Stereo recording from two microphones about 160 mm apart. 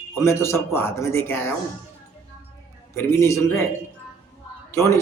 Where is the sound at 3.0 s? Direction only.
15° left (ahead or behind).